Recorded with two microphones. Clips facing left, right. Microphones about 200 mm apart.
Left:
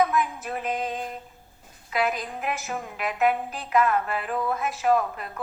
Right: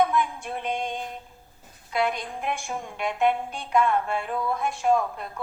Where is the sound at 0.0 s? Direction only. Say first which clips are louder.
Even; 5° left (ahead or behind).